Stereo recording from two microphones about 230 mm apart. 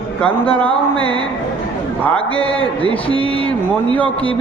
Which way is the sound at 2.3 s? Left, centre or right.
Left.